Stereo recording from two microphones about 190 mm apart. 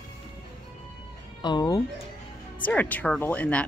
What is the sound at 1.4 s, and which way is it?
Speech, 20° left (ahead or behind).